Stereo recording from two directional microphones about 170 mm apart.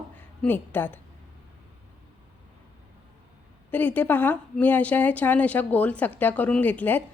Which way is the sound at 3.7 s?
10° left (ahead or behind).